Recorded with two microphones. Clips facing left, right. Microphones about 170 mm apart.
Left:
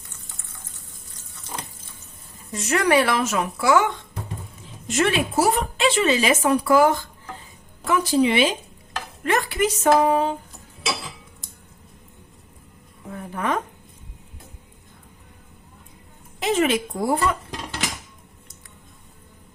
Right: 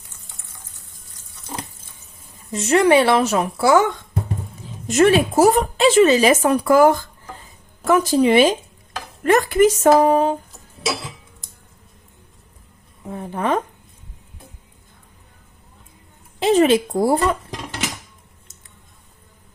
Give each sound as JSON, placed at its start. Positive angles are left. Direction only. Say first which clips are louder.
{"t": 2.5, "sound": "speech", "louder": "right 5 dB", "side_deg": -25}
{"t": 4.9, "sound": "a woman's voice", "louder": "right 7 dB", "side_deg": -45}
{"t": 13.1, "sound": "a woman's voice", "louder": "right 4 dB", "side_deg": -25}
{"t": 16.4, "sound": "a woman's voice", "louder": "right 6 dB", "side_deg": -30}